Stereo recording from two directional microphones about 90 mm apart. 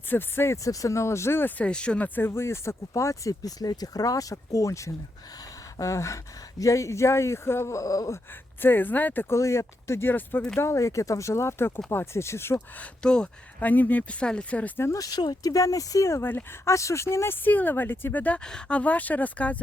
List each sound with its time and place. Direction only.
0.1 s speech: 25° left (ahead or behind)
5.7 s a sound: 35° left (ahead or behind)
6.6 s speech: 35° left (ahead or behind)
8.6 s speech: 20° left (ahead or behind)
9.3 s speech: 35° left (ahead or behind)
10.6 s speech: 35° left (ahead or behind)
12.8 s speech: 10° left (ahead or behind)
14.8 s speech: 35° left (ahead or behind); by 19.5 s 15° left (ahead or behind)